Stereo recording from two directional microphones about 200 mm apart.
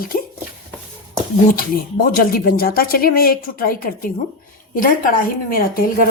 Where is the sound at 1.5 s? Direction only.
45° left (ahead or behind).